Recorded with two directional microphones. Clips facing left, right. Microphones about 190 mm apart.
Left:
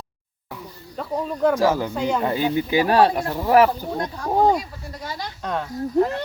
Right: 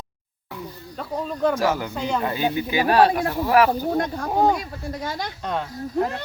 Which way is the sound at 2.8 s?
20° left (ahead or behind).